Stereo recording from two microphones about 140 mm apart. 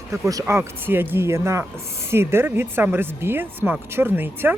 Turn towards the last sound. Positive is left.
turn(degrees=-15)  # may be behind; listen again after turning